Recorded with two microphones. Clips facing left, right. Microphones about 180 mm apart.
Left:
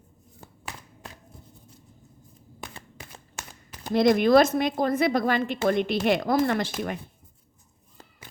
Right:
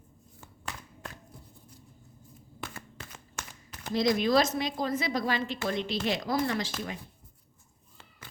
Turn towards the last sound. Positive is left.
turn(degrees=55)  # may be behind; listen again after turning